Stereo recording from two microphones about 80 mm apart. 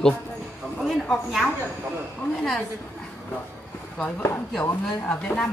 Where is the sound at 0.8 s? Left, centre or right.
Centre.